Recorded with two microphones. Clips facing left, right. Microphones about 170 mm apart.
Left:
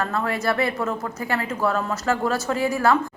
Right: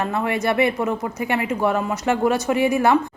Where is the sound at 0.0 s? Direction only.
20° right (ahead or behind).